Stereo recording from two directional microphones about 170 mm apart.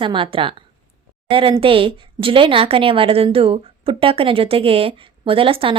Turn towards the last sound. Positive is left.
turn(degrees=-30)  # may be behind; listen again after turning